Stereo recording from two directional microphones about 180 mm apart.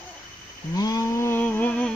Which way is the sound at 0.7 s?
20° left (ahead or behind).